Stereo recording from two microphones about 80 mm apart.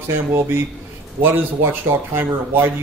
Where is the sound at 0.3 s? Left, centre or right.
Right.